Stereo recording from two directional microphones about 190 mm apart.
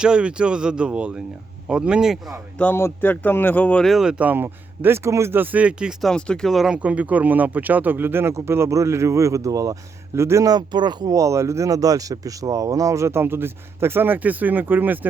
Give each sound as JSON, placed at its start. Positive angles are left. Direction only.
{"t": 0.0, "sound": "speech", "side_deg": -5}
{"t": 2.6, "sound": "speech", "side_deg": 10}